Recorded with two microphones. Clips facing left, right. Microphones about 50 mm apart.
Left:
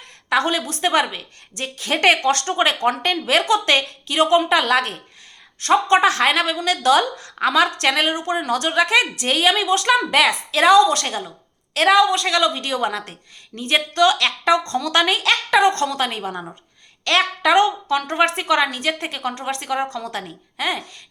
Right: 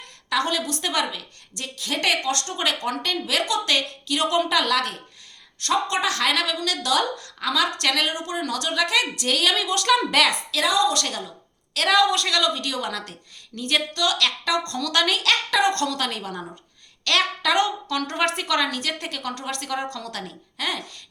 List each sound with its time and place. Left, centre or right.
0.3 s a woman's voice: left
4.4 s a woman's voice: left
7.8 s a woman's voice: left
10.5 s a woman's voice: left
11.9 s a woman's voice: centre